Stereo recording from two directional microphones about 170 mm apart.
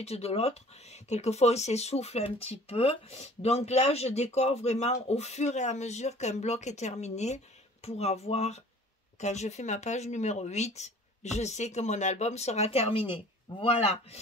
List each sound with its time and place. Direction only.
0.0 s speech: 35° left (ahead or behind)